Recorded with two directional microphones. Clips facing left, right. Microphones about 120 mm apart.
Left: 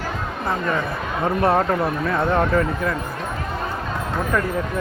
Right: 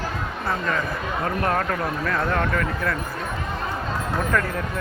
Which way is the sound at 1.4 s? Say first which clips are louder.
Left 7 dB; 25° left (ahead or behind).